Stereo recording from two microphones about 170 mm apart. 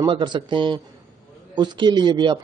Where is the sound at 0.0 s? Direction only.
25° right (ahead or behind).